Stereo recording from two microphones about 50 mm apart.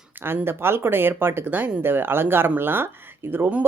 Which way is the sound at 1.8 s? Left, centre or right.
Right.